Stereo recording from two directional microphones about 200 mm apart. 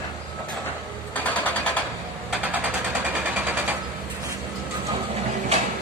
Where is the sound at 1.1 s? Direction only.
10° left (ahead or behind).